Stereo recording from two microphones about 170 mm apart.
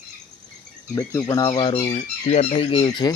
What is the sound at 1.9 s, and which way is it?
Speech, 40° left (ahead or behind).